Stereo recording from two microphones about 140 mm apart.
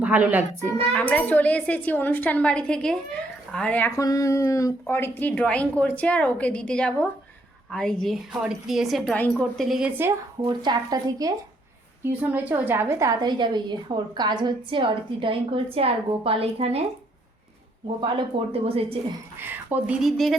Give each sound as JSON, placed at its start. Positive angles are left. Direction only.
{"t": 0.0, "sound": "a child's voice", "side_deg": -10}
{"t": 0.9, "sound": "speech", "side_deg": 10}
{"t": 3.9, "sound": "a woman's voice", "side_deg": 25}
{"t": 10.4, "sound": "speech", "side_deg": -30}
{"t": 12.0, "sound": "a woman's voice", "side_deg": -15}
{"t": 18.0, "sound": "speech", "side_deg": -40}
{"t": 19.4, "sound": "speech", "side_deg": -15}
{"t": 20.0, "sound": "a woman's voice", "side_deg": 0}